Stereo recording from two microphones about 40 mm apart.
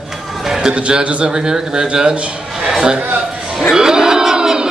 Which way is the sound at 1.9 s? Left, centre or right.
Right.